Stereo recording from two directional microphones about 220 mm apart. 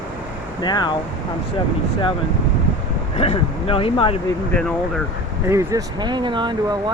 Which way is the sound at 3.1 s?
30° left (ahead or behind).